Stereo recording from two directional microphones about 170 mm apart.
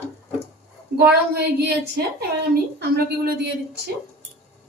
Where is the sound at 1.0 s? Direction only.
70° right (ahead or behind).